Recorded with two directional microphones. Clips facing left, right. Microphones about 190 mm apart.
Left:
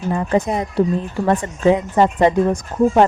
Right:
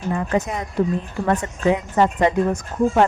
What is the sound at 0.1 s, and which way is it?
A woman's voice, 30° left (ahead or behind).